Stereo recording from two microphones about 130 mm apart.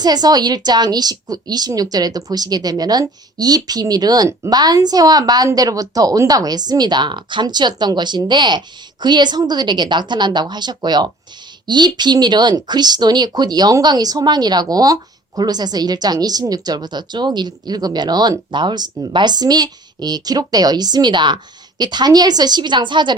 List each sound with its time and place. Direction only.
0.0 s a woman's voice: 30° right (ahead or behind)